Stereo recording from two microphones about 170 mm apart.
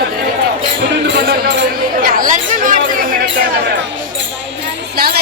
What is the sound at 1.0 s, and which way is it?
Speech, 75° right (ahead or behind).